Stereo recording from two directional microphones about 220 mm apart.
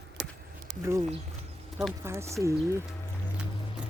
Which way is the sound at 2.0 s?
10° right (ahead or behind).